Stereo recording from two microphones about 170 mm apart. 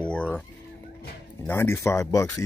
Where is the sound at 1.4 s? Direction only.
15° left (ahead or behind).